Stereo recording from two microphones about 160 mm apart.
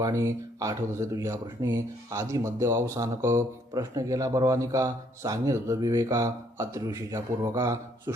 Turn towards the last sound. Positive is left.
turn(degrees=-20)  # may be behind; listen again after turning